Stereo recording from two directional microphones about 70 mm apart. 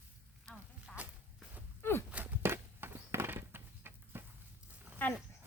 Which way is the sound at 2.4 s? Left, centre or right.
Right.